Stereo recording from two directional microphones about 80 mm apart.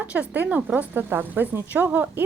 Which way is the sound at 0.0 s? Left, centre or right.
Centre.